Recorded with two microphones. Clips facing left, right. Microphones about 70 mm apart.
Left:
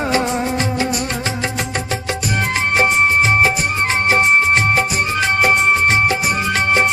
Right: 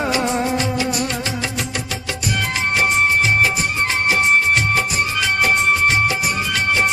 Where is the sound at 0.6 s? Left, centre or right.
Left.